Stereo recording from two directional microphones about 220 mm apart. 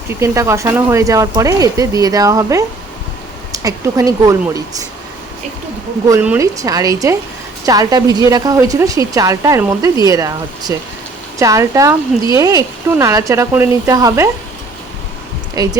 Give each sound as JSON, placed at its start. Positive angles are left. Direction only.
{"t": 0.1, "sound": "speech", "side_deg": -10}
{"t": 6.1, "sound": "speech", "side_deg": -10}
{"t": 15.5, "sound": "speech", "side_deg": -15}